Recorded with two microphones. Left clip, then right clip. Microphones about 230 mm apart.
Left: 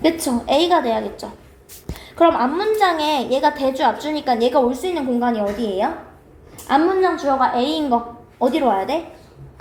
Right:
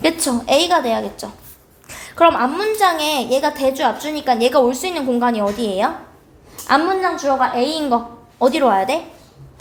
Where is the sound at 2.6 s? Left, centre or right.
Right.